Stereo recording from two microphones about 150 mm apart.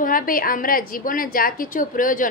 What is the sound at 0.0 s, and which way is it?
A woman's voice, 70° left (ahead or behind).